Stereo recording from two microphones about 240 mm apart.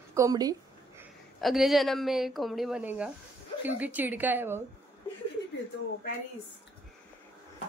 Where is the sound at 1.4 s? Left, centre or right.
Centre.